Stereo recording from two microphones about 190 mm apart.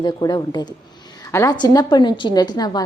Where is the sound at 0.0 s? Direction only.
20° left (ahead or behind).